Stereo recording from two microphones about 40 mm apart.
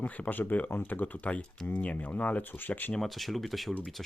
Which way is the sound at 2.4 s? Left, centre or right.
Left.